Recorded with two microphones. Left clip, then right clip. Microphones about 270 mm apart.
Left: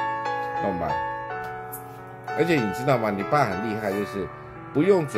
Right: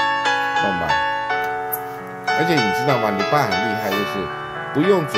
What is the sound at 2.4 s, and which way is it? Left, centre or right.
Speech, centre.